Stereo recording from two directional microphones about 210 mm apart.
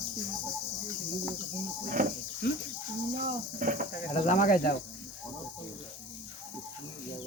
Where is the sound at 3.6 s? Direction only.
40° right (ahead or behind).